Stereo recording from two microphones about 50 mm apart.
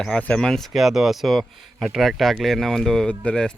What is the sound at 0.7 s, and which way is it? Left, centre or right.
Speech, centre.